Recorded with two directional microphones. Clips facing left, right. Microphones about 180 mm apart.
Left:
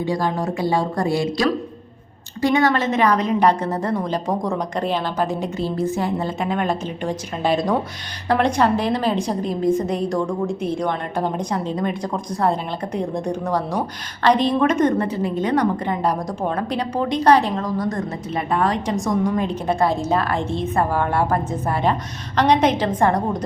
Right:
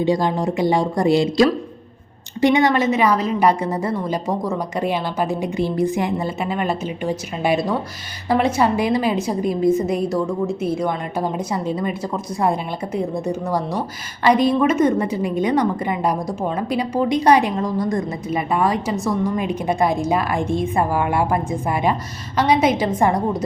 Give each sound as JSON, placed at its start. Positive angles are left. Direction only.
{"t": 0.0, "sound": "a woman's voice", "side_deg": -20}